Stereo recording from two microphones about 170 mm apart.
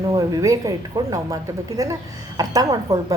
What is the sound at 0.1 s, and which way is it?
A woman's voice, 20° right (ahead or behind).